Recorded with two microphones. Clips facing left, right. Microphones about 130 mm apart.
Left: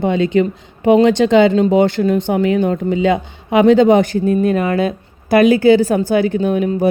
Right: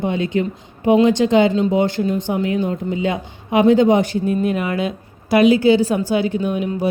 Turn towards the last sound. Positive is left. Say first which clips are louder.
# left 5 dB
turn(degrees=50)  # may be behind; listen again after turning